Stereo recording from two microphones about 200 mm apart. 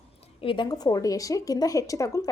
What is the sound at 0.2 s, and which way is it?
Speech, 25° left (ahead or behind).